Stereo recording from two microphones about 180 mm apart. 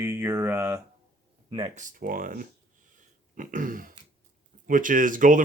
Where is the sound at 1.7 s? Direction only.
45° right (ahead or behind).